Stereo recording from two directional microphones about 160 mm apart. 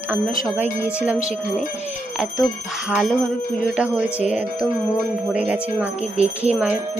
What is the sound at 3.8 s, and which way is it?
Jingle bell, 5° right (ahead or behind).